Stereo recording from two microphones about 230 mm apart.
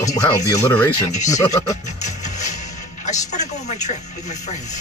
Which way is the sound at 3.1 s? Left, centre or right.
Left.